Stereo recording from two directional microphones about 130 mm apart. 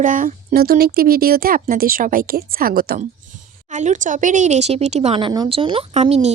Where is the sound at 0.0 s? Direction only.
90° right.